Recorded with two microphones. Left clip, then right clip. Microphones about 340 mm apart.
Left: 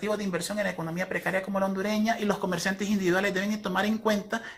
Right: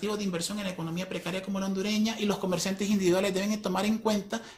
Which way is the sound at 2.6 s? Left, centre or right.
Centre.